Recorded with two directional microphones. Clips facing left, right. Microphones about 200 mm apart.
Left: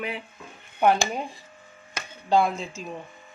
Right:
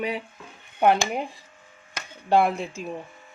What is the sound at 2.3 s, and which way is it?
Cutlery, 65° right (ahead or behind).